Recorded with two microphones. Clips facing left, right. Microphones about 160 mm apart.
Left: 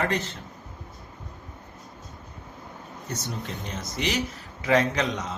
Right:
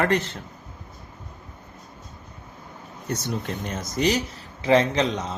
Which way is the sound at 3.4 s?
55° right (ahead or behind).